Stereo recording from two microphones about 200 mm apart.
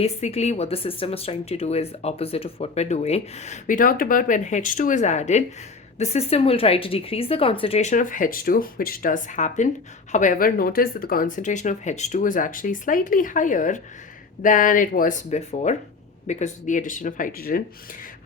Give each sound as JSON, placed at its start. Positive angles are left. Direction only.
{"t": 0.0, "sound": "speech", "side_deg": 30}